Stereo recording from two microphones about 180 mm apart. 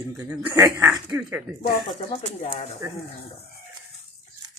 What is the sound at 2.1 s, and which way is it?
Speech, 35° left (ahead or behind).